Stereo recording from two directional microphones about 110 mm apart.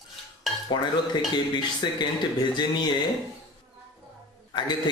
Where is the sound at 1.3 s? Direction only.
45° left (ahead or behind).